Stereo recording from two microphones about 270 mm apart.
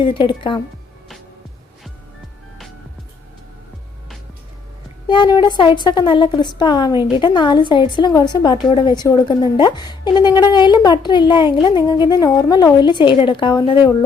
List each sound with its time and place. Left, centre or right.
0.0 s speech: centre
5.0 s speech: centre